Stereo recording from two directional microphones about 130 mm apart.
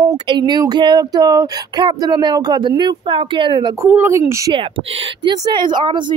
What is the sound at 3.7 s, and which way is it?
Speech, 15° right (ahead or behind).